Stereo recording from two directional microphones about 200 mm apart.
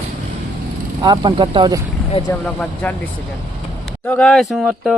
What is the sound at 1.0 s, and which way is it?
Speech, 20° right (ahead or behind).